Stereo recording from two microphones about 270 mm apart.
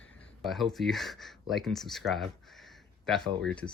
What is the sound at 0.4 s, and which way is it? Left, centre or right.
Speech, centre.